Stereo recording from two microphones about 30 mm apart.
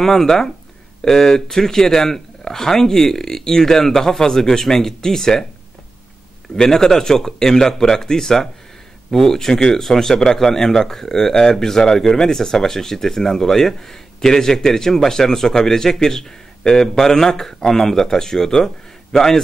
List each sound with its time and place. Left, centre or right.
0.0 s speech: centre
6.5 s speech: centre